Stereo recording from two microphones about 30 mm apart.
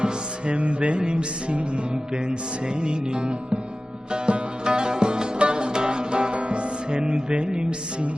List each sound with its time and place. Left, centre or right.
0.0 s music: right
2.8 s music: right
6.9 s speech: right